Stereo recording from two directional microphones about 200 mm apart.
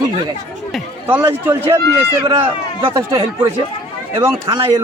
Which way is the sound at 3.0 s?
15° right (ahead or behind).